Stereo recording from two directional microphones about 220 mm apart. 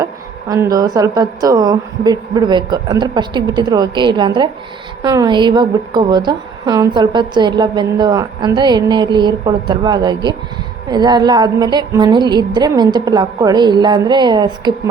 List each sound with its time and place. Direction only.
0.0 s a woman's voice: 15° right (ahead or behind)